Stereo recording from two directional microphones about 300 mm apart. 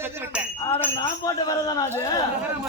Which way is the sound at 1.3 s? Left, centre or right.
Centre.